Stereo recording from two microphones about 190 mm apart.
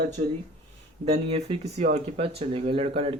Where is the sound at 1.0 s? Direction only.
35° right (ahead or behind).